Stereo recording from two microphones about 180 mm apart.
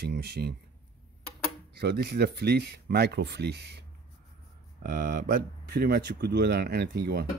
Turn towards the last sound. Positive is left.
turn(degrees=-60)  # may be behind; listen again after turning